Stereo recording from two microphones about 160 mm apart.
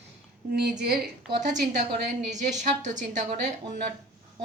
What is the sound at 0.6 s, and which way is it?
Speech, 80° right.